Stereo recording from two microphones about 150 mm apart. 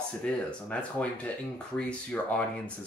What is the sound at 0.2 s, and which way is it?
Speech, 5° left (ahead or behind).